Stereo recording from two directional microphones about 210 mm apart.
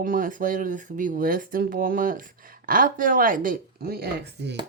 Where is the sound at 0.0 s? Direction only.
40° right (ahead or behind).